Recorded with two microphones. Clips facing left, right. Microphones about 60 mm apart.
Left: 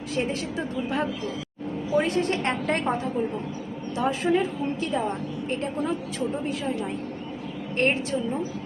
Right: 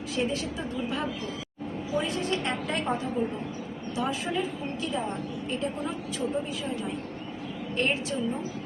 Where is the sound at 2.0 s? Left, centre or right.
Left.